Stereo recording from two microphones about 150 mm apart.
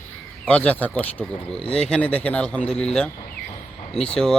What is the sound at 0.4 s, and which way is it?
Speech, 10° left (ahead or behind).